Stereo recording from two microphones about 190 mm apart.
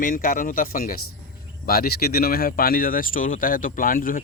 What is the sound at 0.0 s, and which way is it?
Speech, 45° left (ahead or behind).